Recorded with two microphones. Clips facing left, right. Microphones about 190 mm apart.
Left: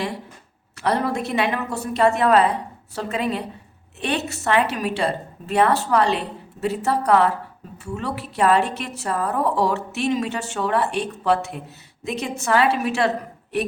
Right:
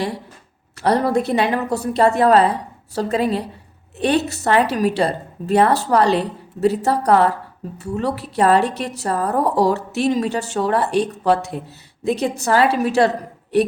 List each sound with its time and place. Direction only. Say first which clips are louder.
0.8 s a woman's voice: right 5 dB; 35° right (ahead or behind)